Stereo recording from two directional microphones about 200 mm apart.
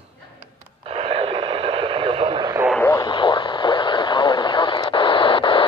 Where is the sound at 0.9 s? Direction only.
30° right (ahead or behind).